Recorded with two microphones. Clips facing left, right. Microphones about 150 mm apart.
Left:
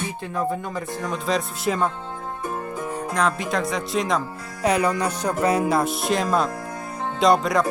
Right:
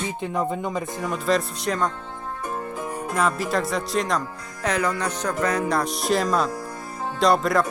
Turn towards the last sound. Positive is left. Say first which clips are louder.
# left 1 dB
turn(degrees=0)  # may be behind; listen again after turning